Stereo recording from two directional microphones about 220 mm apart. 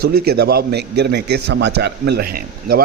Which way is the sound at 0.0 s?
45° right (ahead or behind).